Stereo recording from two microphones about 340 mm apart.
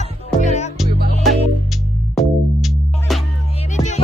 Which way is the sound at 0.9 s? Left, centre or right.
Right.